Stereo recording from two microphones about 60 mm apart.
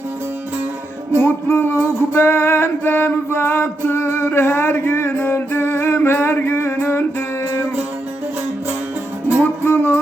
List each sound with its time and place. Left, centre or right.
1.2 s music: left
6.1 s a sound: left
9.4 s music: left